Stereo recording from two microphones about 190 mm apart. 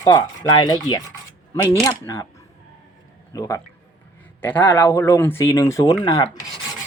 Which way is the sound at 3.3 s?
15° left (ahead or behind).